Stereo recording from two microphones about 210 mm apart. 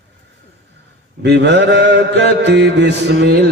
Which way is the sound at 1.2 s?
55° right (ahead or behind).